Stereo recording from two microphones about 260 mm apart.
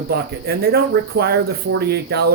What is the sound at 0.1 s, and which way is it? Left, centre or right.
Speech, right.